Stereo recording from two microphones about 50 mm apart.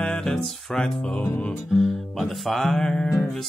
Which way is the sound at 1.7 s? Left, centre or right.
Centre.